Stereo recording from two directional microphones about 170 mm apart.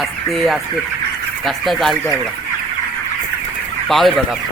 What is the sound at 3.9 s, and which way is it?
Speech, centre (ahead or behind).